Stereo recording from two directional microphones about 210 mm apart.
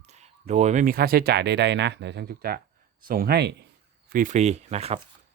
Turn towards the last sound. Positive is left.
turn(degrees=-30)  # may be behind; listen again after turning